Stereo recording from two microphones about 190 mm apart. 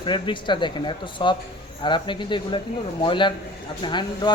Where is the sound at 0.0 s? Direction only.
25° left (ahead or behind).